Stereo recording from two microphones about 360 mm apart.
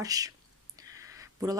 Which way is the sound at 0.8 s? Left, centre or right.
Centre.